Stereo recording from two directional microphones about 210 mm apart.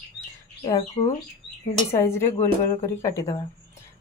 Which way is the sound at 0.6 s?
20° left (ahead or behind).